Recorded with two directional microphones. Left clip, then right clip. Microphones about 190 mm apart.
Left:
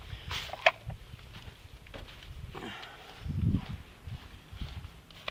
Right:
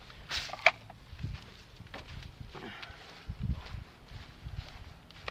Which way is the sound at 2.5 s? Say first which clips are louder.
Left 3 dB; 40° left (ahead or behind).